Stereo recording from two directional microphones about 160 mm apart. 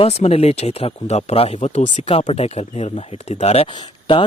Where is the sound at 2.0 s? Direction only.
40° left (ahead or behind).